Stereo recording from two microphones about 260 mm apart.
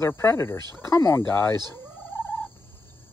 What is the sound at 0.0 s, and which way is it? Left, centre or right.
Speech, centre.